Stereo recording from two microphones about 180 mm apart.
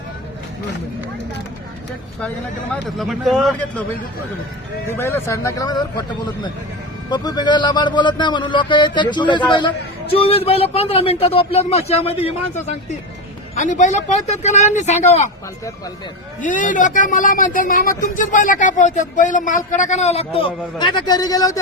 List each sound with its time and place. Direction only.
3.0 s a man's voice: centre (ahead or behind)
4.9 s speech: 15° left (ahead or behind)
7.1 s a man's voice: 25° left (ahead or behind); by 15.3 s 40° left (ahead or behind)
16.4 s speech: 45° left (ahead or behind); by 21.6 s 20° left (ahead or behind)